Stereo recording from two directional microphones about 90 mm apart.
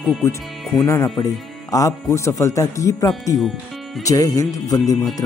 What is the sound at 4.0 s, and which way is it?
Speech, 40° left (ahead or behind).